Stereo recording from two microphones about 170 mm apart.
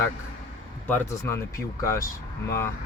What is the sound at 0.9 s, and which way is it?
Speech, 15° left (ahead or behind).